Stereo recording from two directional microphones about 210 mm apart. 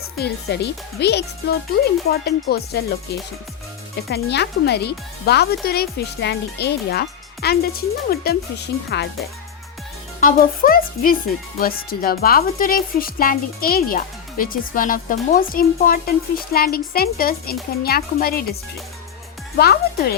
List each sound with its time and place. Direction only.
0.2 s speech: 50° left (ahead or behind)
10.2 s speech: 40° left (ahead or behind)
19.5 s speech: 45° left (ahead or behind)